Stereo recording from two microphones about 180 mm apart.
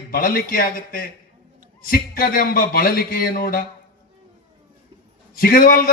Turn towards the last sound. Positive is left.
turn(degrees=50)  # may be behind; listen again after turning